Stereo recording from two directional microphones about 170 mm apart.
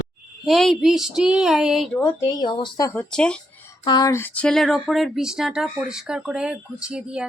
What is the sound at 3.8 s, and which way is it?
Speech, 25° left (ahead or behind).